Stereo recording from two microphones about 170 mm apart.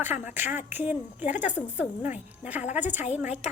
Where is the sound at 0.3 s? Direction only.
10° right (ahead or behind).